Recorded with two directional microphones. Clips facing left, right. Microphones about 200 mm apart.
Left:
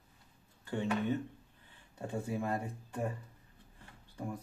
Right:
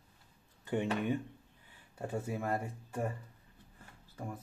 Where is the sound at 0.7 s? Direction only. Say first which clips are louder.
Right 1 dB; 15° right (ahead or behind).